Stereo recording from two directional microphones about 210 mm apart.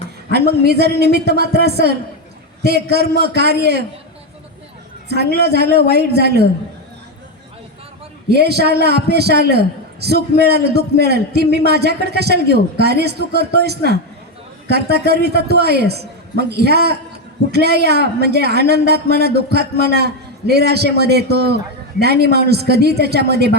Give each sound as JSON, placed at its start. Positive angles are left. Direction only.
{"t": 0.3, "sound": "a man's voice", "side_deg": -50}
{"t": 5.0, "sound": "a man's voice", "side_deg": -50}
{"t": 8.3, "sound": "a man's voice", "side_deg": -50}